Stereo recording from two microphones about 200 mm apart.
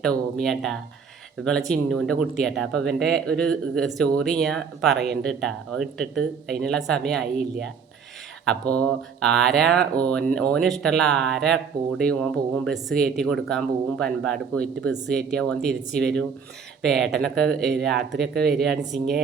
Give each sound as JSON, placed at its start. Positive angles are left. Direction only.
{"t": 0.0, "sound": "speech", "side_deg": 0}
{"t": 8.7, "sound": "speech", "side_deg": 5}